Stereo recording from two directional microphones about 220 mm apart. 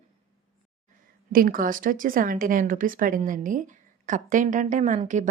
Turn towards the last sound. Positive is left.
turn(degrees=-35)  # may be behind; listen again after turning